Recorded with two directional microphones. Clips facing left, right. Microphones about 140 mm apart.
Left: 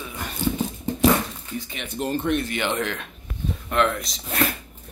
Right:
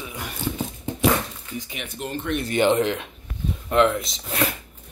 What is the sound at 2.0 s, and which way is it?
Speech, 40° left (ahead or behind).